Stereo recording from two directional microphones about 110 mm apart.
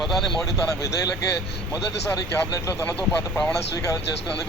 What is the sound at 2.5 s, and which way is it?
Speech, 25° left (ahead or behind).